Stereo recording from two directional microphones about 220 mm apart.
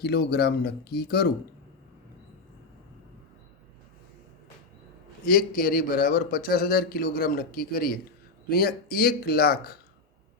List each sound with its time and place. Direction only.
0.0 s speech: 45° left (ahead or behind)
5.2 s a man's voice: 40° left (ahead or behind)